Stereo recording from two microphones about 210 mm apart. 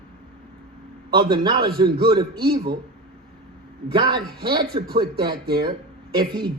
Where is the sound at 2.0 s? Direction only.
20° right (ahead or behind).